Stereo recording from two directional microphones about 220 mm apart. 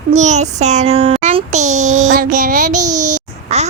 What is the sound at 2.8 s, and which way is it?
Speech, 90° right.